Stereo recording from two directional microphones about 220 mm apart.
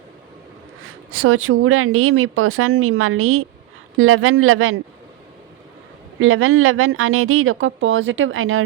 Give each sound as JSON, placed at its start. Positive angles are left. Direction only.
{"t": 1.1, "sound": "a woman's voice", "side_deg": -75}
{"t": 6.1, "sound": "a woman's voice", "side_deg": -70}